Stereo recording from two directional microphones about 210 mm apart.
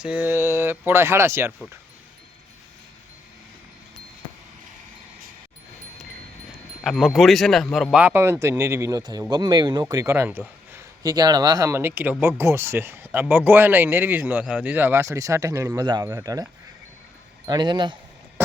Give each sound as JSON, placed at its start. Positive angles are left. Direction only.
{"t": 0.0, "sound": "speech", "side_deg": -5}
{"t": 6.8, "sound": "speech", "side_deg": 0}